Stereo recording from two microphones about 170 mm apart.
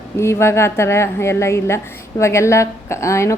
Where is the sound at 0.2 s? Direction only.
15° left (ahead or behind).